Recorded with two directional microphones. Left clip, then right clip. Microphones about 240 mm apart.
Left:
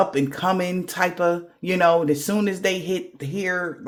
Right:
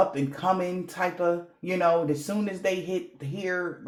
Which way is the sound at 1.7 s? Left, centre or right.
Left.